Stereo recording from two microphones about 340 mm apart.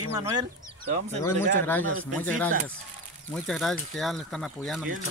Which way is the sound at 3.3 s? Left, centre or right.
Centre.